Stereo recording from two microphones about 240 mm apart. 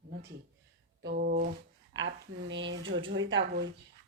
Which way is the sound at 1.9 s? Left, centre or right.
Right.